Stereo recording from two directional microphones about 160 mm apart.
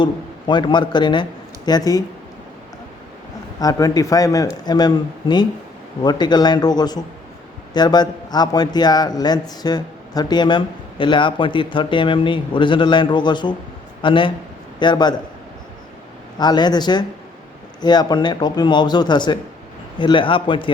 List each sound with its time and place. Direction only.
0.0 s a man's voice: 30° left (ahead or behind)
3.6 s a man's voice: 20° left (ahead or behind)
16.4 s a man's voice: 25° left (ahead or behind)